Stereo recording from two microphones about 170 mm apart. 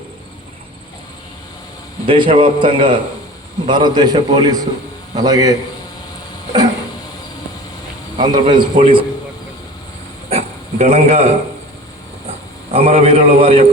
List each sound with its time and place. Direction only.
2.0 s a man's voice: 30° right (ahead or behind)
8.2 s a man's voice: 25° right (ahead or behind)
10.2 s a sound: 35° right (ahead or behind)
12.7 s a man's voice: 35° right (ahead or behind)